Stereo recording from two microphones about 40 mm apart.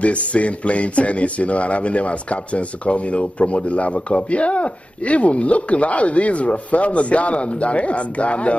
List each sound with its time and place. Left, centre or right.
0.0 s speech: left